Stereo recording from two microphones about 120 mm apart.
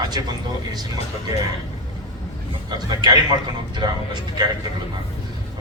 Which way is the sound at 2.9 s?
35° right (ahead or behind).